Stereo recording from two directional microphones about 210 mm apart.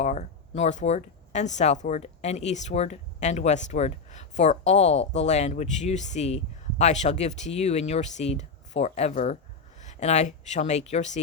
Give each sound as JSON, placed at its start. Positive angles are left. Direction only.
{"t": 0.0, "sound": "speech", "side_deg": 35}